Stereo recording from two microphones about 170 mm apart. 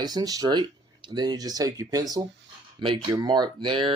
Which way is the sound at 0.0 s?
25° right (ahead or behind).